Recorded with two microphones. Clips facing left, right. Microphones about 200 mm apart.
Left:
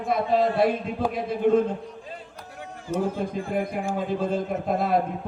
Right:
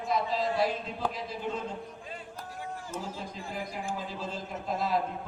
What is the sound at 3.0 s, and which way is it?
A man's voice, 55° left (ahead or behind).